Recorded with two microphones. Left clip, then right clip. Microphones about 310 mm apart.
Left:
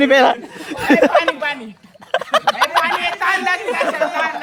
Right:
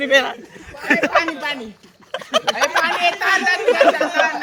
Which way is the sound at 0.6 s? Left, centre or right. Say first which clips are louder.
Left 5 dB; centre.